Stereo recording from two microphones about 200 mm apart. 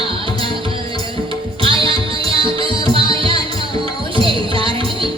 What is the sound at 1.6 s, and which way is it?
Music, 25° right (ahead or behind).